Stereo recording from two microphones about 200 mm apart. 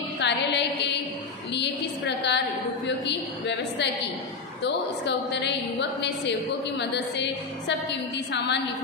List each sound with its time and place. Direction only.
0.2 s music: 60° left (ahead or behind)
1.5 s a woman's voice: 60° left (ahead or behind)